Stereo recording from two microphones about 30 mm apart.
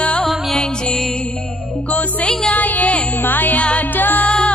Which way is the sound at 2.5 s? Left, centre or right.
Left.